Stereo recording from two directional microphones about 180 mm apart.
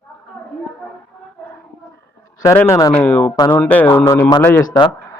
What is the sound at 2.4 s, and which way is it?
Speech, 15° left (ahead or behind).